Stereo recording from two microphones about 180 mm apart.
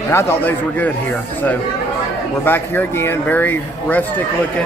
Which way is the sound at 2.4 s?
10° left (ahead or behind).